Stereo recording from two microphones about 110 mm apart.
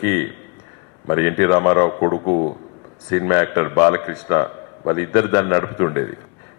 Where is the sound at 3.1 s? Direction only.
25° left (ahead or behind).